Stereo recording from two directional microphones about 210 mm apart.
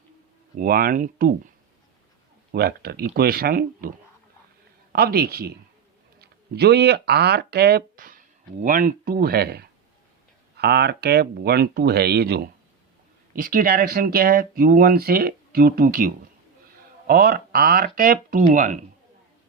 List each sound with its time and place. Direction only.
0.5 s speech: 40° right (ahead or behind)
2.5 s speech: 45° right (ahead or behind)